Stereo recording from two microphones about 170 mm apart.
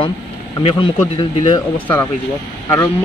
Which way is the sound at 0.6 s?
30° left (ahead or behind).